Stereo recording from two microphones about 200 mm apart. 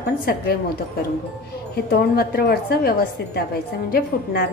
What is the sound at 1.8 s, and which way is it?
A woman's voice, 50° left (ahead or behind).